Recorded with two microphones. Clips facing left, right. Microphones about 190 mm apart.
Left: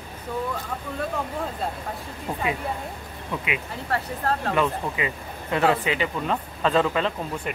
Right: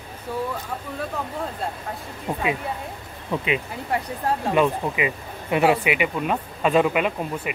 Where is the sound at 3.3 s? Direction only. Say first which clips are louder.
Right 5 dB; 25° right (ahead or behind).